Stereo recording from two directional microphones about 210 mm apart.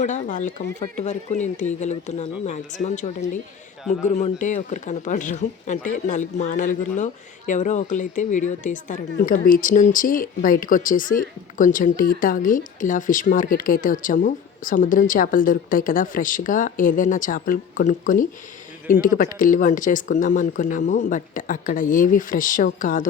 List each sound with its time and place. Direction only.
0.0 s speech: 35° left (ahead or behind)